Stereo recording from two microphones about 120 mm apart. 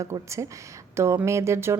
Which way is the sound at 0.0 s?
25° right (ahead or behind).